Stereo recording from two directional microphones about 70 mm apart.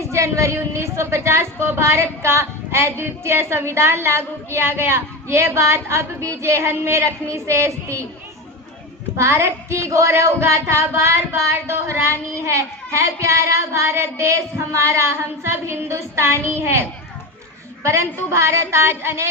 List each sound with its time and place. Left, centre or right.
0.1 s a woman's voice: right
9.1 s a sound: right
17.8 s a woman's voice: right